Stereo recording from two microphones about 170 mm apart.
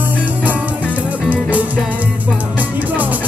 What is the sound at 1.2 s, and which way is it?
Music, 10° right (ahead or behind).